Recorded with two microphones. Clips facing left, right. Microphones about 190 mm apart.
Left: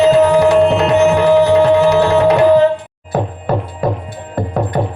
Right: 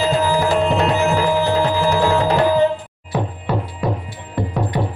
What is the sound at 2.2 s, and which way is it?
Tabla, 75° left (ahead or behind).